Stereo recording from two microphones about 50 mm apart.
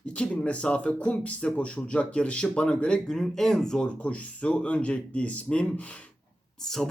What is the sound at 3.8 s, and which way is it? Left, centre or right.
A man's voice, left.